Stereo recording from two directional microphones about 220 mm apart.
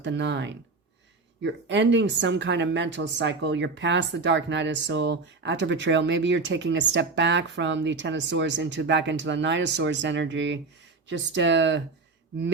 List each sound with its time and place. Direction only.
0.0 s speech: 55° right (ahead or behind)